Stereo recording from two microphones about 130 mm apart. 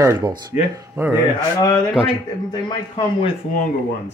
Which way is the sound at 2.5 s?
35° left (ahead or behind).